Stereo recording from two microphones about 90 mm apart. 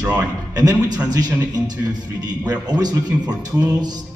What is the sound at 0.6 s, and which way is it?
Speech, 45° right (ahead or behind).